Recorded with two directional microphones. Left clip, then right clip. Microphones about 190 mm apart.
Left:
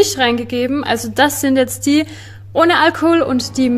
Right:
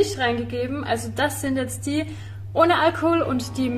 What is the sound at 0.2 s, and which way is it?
A woman's voice, 60° left (ahead or behind).